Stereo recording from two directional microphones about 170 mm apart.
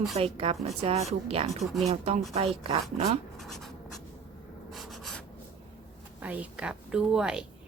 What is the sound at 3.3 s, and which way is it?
Speech, centre (ahead or behind).